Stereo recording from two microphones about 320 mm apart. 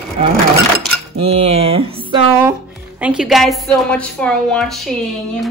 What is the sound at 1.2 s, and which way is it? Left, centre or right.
Speech, centre.